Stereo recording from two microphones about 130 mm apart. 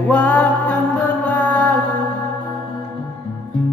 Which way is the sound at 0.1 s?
10° left (ahead or behind).